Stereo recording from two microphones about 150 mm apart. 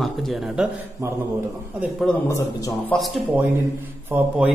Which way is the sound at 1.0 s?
20° right (ahead or behind).